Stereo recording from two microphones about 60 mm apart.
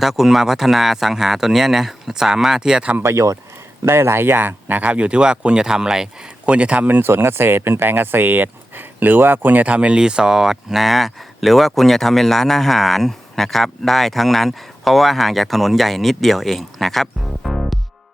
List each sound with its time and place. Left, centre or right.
0.0 s speech: centre
3.0 s speech: right; by 6.8 s centre
6.8 s speech: right
7.1 s speech: right; by 17.7 s centre